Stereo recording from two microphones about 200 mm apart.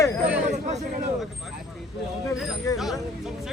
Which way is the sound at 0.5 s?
35° right (ahead or behind).